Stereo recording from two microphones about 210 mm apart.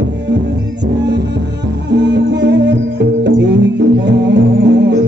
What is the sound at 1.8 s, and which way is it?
Music, 55° right (ahead or behind).